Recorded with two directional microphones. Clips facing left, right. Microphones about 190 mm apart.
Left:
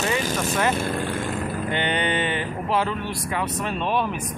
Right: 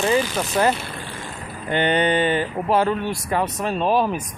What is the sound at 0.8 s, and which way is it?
Vehicle, 50° left (ahead or behind).